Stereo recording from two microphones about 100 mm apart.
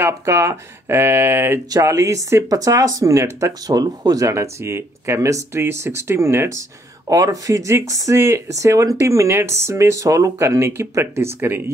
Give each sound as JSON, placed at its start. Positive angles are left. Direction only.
{"t": 0.0, "sound": "speech", "side_deg": -25}